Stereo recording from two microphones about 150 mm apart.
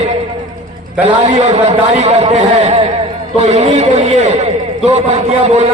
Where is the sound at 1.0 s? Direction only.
35° right (ahead or behind).